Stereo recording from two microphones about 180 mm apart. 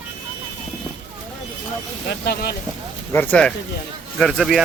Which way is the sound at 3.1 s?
10° left (ahead or behind).